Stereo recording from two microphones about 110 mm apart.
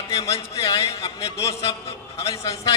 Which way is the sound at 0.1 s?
65° left (ahead or behind).